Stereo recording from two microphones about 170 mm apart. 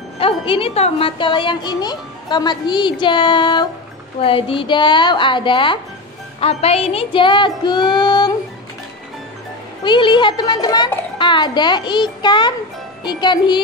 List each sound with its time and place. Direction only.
0.2 s a child's voice: 35° left (ahead or behind)
9.8 s a child's voice: 30° left (ahead or behind)